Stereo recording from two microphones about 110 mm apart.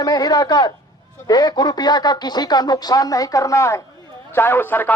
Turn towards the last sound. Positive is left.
turn(degrees=20)  # may be behind; listen again after turning